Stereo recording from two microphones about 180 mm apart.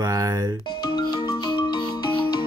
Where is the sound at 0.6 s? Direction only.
25° left (ahead or behind).